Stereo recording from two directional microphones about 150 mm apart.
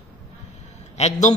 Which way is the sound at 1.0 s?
50° left (ahead or behind).